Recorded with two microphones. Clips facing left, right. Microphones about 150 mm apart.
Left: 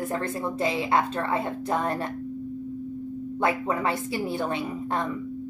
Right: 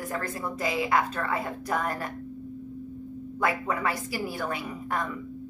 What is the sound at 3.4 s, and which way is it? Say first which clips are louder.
A woman's voice: left 2 dB; 25° left (ahead or behind).